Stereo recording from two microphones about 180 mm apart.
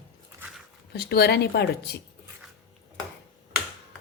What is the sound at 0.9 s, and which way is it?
Speech, 60° left (ahead or behind).